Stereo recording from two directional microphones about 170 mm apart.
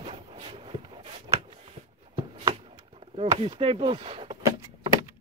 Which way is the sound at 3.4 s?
35° right (ahead or behind).